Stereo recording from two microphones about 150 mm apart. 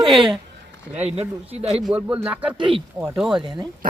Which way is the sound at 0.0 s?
Centre (ahead or behind).